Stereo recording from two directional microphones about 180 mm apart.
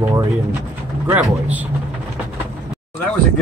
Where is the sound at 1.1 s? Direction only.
10° right (ahead or behind).